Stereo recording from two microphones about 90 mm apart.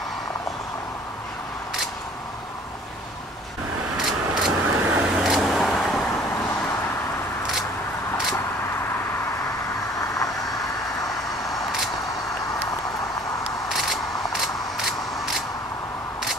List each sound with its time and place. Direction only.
3.9 s vehicle: 5° right (ahead or behind)
9.9 s vehicle: 40° left (ahead or behind)
13.7 s a sound: centre (ahead or behind)